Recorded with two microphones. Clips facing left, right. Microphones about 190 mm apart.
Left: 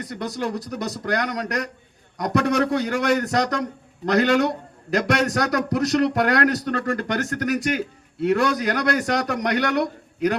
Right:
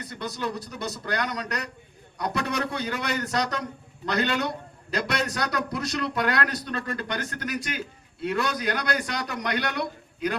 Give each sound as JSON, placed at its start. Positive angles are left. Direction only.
{"t": 0.1, "sound": "a man's voice", "side_deg": 75}